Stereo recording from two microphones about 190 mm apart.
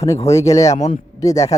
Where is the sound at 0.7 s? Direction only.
35° left (ahead or behind).